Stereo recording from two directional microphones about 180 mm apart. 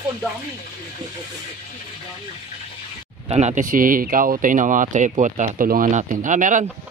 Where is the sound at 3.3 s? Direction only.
40° right (ahead or behind).